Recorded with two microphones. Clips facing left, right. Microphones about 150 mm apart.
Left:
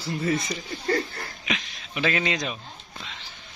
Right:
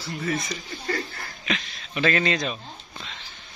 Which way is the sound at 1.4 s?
10° left (ahead or behind).